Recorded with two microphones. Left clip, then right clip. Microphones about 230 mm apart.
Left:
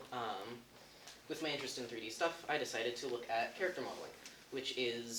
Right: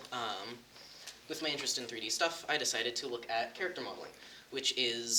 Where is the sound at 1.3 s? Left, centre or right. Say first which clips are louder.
Right 5 dB; right.